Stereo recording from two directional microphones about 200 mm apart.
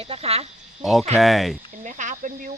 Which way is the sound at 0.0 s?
30° right (ahead or behind).